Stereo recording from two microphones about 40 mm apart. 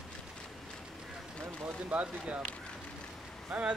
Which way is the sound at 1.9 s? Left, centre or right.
Right.